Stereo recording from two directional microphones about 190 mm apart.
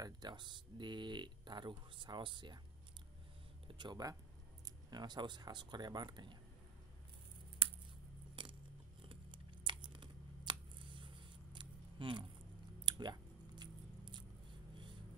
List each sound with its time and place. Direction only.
0.0 s speech: 20° right (ahead or behind)
3.6 s speech: 25° right (ahead or behind)
8.4 s a sound: 25° right (ahead or behind)
12.8 s chewing: 20° right (ahead or behind)